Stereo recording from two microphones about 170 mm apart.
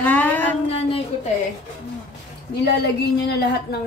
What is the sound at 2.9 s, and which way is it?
Speech, 75° left (ahead or behind).